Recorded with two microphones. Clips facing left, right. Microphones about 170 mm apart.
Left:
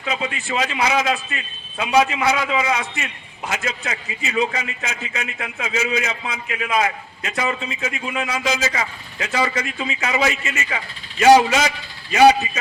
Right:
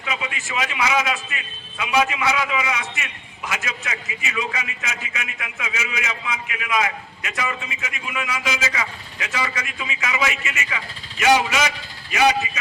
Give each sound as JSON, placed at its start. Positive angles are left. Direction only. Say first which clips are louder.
{"t": 0.0, "sound": "a man's voice", "louder": "left 4 dB", "side_deg": 35}